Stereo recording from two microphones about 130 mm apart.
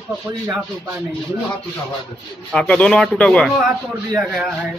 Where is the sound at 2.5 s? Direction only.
5° left (ahead or behind).